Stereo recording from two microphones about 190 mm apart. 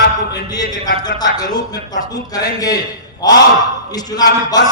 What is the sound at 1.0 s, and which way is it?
A man's voice, 20° left (ahead or behind).